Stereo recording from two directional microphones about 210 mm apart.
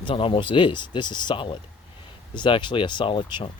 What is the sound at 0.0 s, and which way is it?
Speech, 25° left (ahead or behind).